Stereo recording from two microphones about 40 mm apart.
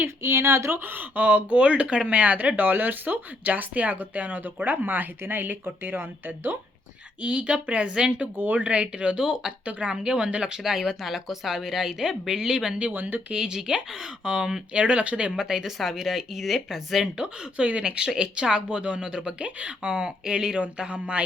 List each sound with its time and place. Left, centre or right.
0.0 s speech: right
2.6 s speech: right
7.2 s speech: right
9.2 s speech: centre
9.6 s speech: right
9.9 s speech: right
10.6 s speech: centre
12.9 s speech: right
13.3 s speech: centre
15.4 s speech: centre
17.2 s speech: right